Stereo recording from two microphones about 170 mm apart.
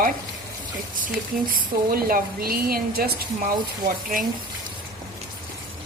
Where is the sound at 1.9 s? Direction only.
60° right (ahead or behind).